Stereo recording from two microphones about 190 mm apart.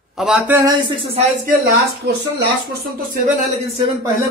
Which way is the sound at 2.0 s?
60° right (ahead or behind).